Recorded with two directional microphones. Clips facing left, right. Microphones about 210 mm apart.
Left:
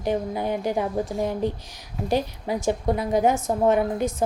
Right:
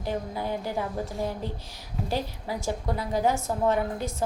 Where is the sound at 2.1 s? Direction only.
20° left (ahead or behind).